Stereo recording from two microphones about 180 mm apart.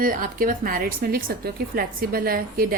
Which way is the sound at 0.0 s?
50° right (ahead or behind).